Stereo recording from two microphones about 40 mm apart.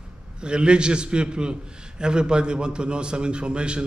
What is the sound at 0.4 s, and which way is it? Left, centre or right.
A man's voice, right.